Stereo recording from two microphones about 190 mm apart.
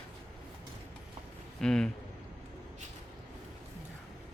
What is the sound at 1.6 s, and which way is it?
Speech, 5° left (ahead or behind).